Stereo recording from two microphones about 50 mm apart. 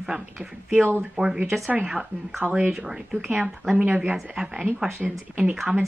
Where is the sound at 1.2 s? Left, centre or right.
Centre.